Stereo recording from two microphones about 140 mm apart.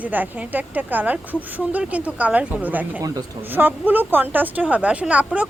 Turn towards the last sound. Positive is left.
turn(degrees=-10)  # may be behind; listen again after turning